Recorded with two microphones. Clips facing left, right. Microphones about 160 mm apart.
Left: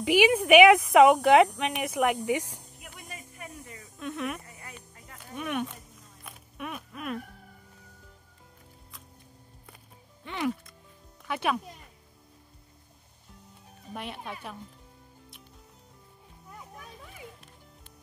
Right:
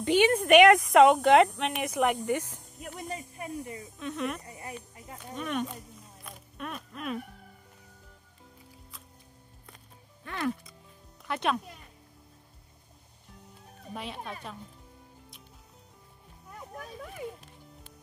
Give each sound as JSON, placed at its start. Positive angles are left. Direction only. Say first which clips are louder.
{"t": 0.0, "sound": "speech", "louder": "left 1 dB", "side_deg": 10}
{"t": 2.8, "sound": "a sound", "louder": "right 9 dB", "side_deg": -30}
{"t": 4.0, "sound": "speech", "louder": "even", "side_deg": 0}
{"t": 4.5, "sound": "a sound", "louder": "right 6 dB", "side_deg": -25}
{"t": 5.3, "sound": "speech", "louder": "even", "side_deg": 5}
{"t": 6.2, "sound": "a sound", "louder": "left 1 dB", "side_deg": 5}
{"t": 10.2, "sound": "music", "louder": "left 1 dB", "side_deg": 15}
{"t": 11.2, "sound": "speech", "louder": "even", "side_deg": 5}
{"t": 13.9, "sound": "speech", "louder": "even", "side_deg": 0}